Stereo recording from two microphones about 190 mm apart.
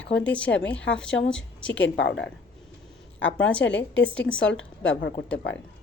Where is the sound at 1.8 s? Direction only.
80° left.